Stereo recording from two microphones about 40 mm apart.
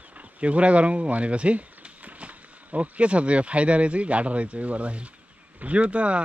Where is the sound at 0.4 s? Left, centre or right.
Right.